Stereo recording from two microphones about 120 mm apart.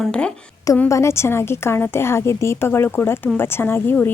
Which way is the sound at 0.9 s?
25° left (ahead or behind).